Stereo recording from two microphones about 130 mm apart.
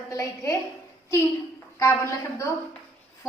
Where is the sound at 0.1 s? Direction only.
25° left (ahead or behind).